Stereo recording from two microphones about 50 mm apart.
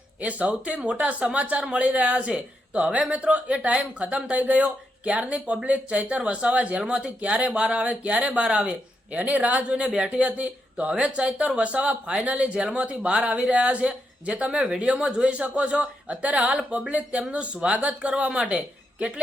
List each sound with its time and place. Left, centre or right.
0.2 s speech: right